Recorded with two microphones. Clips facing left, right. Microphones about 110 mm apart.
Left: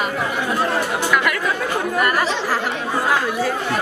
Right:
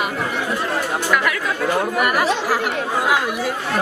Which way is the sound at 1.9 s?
10° right (ahead or behind).